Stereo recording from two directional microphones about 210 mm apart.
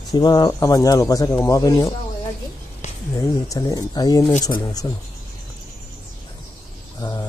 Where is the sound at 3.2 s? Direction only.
15° left (ahead or behind).